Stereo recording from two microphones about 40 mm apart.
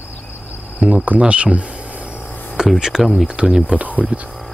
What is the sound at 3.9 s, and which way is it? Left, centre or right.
Speech, right.